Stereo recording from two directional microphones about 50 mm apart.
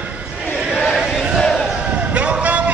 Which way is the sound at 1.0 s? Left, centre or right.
Centre.